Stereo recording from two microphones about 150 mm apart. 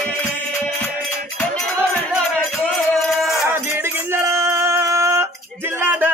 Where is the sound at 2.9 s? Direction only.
Centre (ahead or behind).